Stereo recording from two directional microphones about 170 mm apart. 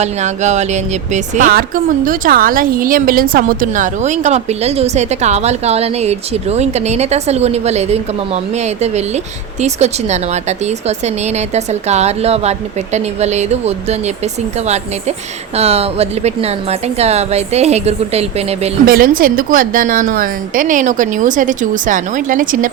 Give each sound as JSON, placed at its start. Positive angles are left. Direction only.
{"t": 0.0, "sound": "speech", "side_deg": -45}
{"t": 15.5, "sound": "speech", "side_deg": -35}
{"t": 18.9, "sound": "a woman's voice", "side_deg": -60}